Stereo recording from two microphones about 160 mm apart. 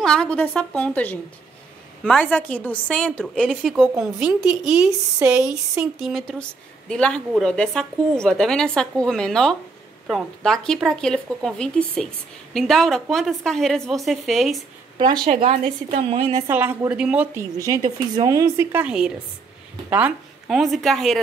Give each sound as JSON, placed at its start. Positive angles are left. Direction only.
{"t": 0.0, "sound": "a woman's voice", "side_deg": 5}
{"t": 3.9, "sound": "a woman's voice", "side_deg": -15}
{"t": 4.4, "sound": "a woman's voice", "side_deg": -5}
{"t": 15.2, "sound": "a woman's voice", "side_deg": -40}
{"t": 16.4, "sound": "a woman's voice", "side_deg": -15}
{"t": 17.6, "sound": "a woman's voice", "side_deg": -20}